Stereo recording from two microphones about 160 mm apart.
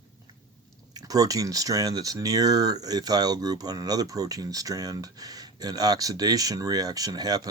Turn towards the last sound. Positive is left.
turn(degrees=-25)  # may be behind; listen again after turning